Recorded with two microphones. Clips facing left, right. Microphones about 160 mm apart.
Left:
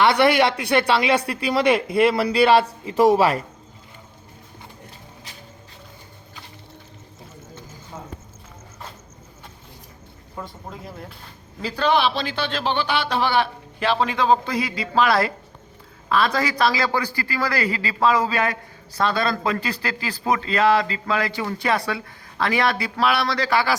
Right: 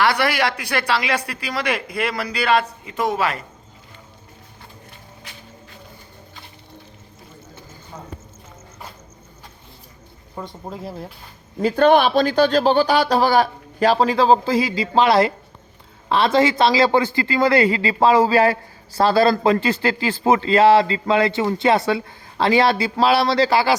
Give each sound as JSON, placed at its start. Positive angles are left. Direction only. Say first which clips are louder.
{"t": 0.0, "sound": "speech", "louder": "left 3 dB", "side_deg": 25}
{"t": 10.6, "sound": "speech", "louder": "right 5 dB", "side_deg": -25}
{"t": 11.6, "sound": "speech", "louder": "right 6 dB", "side_deg": -50}